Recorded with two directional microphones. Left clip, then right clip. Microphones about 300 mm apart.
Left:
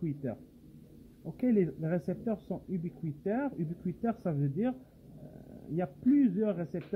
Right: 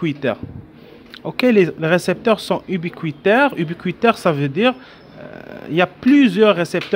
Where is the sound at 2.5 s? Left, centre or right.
Right.